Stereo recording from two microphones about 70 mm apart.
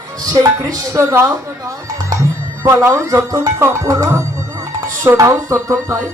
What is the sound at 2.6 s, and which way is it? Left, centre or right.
Speech, right.